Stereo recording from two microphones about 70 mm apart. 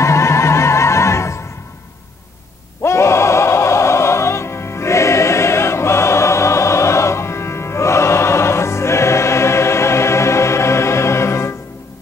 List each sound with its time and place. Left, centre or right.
0.0 s music: left
2.8 s music: left